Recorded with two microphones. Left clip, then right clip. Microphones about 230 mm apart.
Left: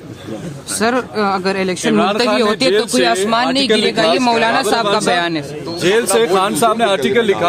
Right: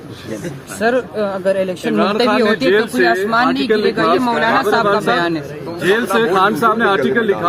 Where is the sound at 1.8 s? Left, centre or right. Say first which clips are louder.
Left 2 dB; left.